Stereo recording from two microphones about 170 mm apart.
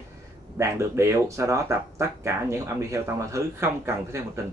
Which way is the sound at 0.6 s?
15° right (ahead or behind).